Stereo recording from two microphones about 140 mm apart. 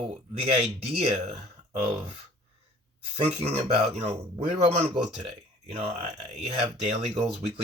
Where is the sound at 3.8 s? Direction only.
50° right (ahead or behind).